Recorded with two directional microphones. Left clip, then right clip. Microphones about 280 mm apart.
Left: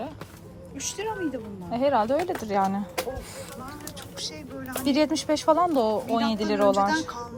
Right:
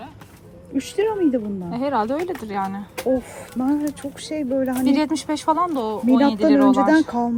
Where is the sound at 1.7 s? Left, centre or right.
Centre.